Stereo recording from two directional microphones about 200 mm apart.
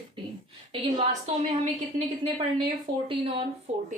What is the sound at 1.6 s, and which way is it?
A woman's voice, 35° right (ahead or behind).